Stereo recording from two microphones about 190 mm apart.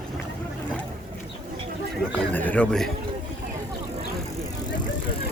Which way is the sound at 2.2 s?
10° left (ahead or behind).